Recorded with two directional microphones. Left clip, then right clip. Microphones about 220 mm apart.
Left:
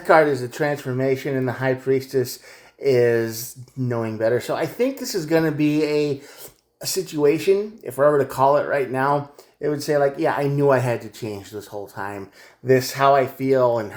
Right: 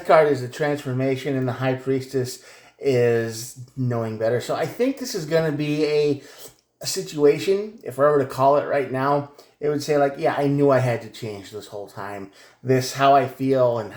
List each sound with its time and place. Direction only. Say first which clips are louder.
0.1 s speech: even; 35° left (ahead or behind)